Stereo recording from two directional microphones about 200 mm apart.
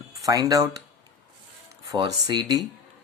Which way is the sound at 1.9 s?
20° right (ahead or behind).